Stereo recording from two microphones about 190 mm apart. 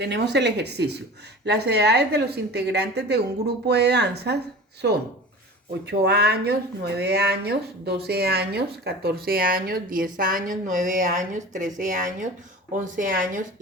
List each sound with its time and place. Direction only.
0.0 s speech: 65° right (ahead or behind)
5.8 s speech: 60° right (ahead or behind); by 13.4 s 45° right (ahead or behind)